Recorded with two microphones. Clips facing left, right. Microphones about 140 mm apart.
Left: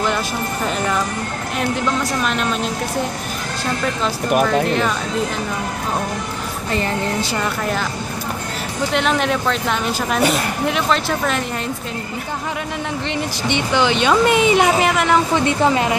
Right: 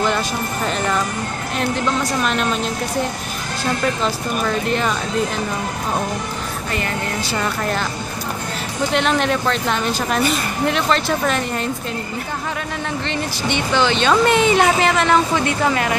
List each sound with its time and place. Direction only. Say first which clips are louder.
0.7 s a woman's voice: even; 5° left (ahead or behind)
2.2 s a woman's voice: right 1 dB; centre (ahead or behind)
4.3 s speech: left 5 dB; 75° left (ahead or behind)
4.6 s a woman's voice: left 1 dB; centre (ahead or behind)
8.9 s a woman's voice: even; centre (ahead or behind)
13.1 s speech: left 2 dB; 15° left (ahead or behind)
15.3 s a woman's voice: left 2 dB; 20° left (ahead or behind)